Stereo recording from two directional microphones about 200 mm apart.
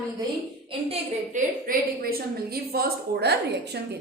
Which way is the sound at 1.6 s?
50° right (ahead or behind).